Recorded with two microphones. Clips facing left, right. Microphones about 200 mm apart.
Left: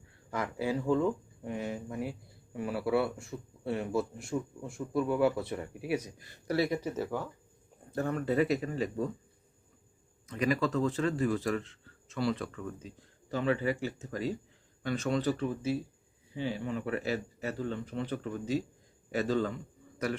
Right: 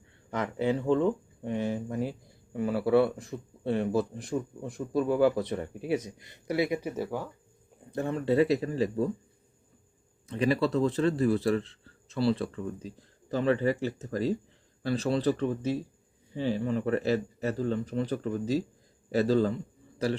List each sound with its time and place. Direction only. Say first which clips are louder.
0.3 s speech: right 4 dB; 25° right (ahead or behind); by 7.3 s 10° right (ahead or behind)
7.9 s a man's voice: right 4 dB; 25° right (ahead or behind)
10.2 s a man's voice: right 3 dB; 30° right (ahead or behind)